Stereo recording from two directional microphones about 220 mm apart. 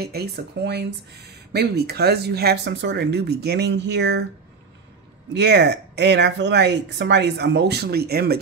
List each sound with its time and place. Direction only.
0.0 s speech: 45° right (ahead or behind)
5.3 s speech: 50° right (ahead or behind)